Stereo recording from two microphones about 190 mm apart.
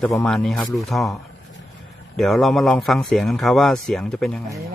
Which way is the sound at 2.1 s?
Centre (ahead or behind).